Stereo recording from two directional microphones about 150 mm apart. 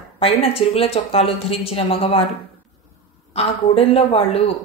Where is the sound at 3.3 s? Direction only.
40° left (ahead or behind).